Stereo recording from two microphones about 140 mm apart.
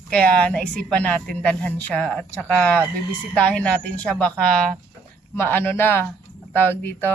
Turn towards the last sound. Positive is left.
turn(degrees=15)  # may be behind; listen again after turning